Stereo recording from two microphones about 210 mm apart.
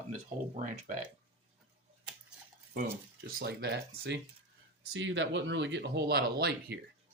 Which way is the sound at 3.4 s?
50° right (ahead or behind).